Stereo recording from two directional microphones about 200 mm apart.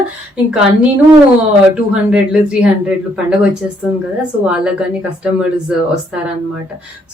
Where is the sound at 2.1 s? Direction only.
5° right (ahead or behind).